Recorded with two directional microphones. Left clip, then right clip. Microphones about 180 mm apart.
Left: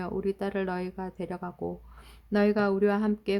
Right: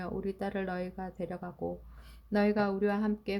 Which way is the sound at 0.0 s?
20° left (ahead or behind).